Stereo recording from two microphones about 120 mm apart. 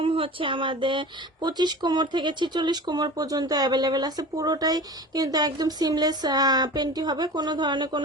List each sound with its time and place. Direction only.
0.0 s speech: 45° right (ahead or behind)